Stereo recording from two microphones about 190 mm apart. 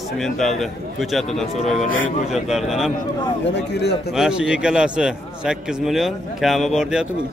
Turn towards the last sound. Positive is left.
turn(degrees=-5)  # may be behind; listen again after turning